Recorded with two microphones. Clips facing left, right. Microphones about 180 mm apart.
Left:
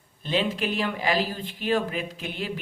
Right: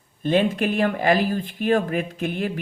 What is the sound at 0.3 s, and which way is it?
Speech, 50° right (ahead or behind).